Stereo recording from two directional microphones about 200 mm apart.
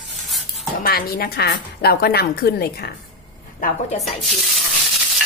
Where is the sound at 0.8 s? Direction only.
45° left (ahead or behind).